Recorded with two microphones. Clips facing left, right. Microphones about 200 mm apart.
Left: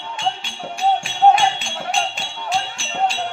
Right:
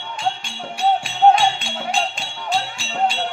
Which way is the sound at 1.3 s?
Centre (ahead or behind).